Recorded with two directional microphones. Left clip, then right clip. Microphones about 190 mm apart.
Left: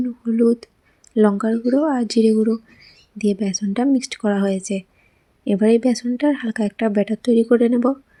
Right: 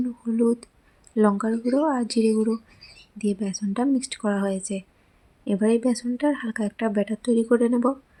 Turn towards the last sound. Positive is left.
turn(degrees=15)  # may be behind; listen again after turning